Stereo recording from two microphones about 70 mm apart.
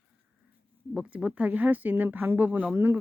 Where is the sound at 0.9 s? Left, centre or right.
Centre.